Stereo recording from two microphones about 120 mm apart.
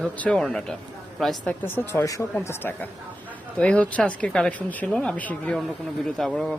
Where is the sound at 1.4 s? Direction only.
20° left (ahead or behind).